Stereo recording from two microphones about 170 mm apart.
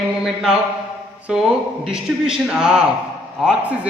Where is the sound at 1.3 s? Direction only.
5° right (ahead or behind).